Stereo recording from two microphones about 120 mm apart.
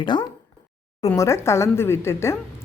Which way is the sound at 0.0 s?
40° left (ahead or behind).